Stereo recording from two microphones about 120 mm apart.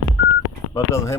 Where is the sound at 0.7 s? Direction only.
25° left (ahead or behind).